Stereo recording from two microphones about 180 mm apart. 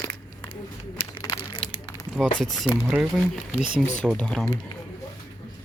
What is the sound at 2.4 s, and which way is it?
Speech, centre (ahead or behind).